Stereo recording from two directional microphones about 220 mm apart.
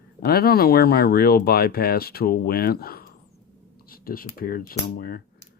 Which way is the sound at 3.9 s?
40° left (ahead or behind).